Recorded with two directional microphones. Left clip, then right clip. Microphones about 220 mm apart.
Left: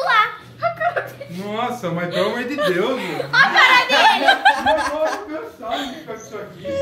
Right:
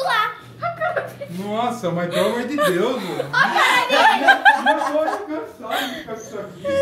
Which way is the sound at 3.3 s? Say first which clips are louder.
Left 4 dB; 30° left (ahead or behind).